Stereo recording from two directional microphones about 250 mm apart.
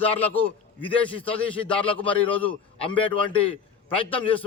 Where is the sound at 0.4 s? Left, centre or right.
Left.